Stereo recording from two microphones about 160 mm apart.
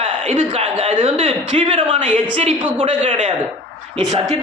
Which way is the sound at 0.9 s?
35° right (ahead or behind).